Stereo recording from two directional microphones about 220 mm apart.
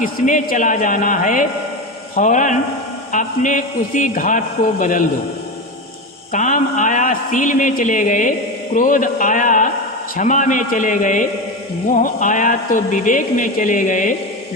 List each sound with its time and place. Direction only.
0.0 s a man's voice: 35° left (ahead or behind)
6.3 s a man's voice: 35° left (ahead or behind)